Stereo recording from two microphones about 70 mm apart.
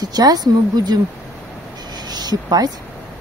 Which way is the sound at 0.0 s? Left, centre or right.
Right.